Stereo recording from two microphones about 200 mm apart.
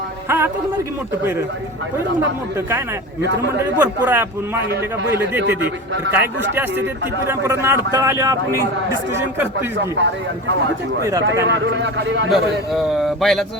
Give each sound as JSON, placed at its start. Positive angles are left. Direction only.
{"t": 0.3, "sound": "music", "side_deg": -10}
{"t": 2.6, "sound": "a man's voice", "side_deg": -10}
{"t": 5.4, "sound": "speech", "side_deg": -55}
{"t": 7.3, "sound": "a man's voice", "side_deg": -15}
{"t": 9.7, "sound": "speech", "side_deg": -60}
{"t": 11.4, "sound": "speech", "side_deg": -60}
{"t": 12.3, "sound": "a man's voice", "side_deg": 0}